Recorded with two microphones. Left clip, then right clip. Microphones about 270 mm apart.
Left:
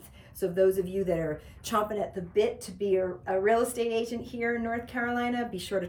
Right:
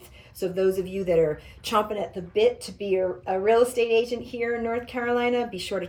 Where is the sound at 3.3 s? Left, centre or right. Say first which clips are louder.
Right 5 dB; centre.